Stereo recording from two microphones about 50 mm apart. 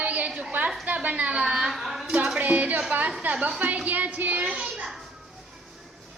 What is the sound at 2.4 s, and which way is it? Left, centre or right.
A woman's voice, right.